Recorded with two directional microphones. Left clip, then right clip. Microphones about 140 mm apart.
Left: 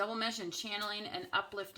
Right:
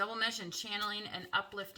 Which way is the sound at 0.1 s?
25° left (ahead or behind).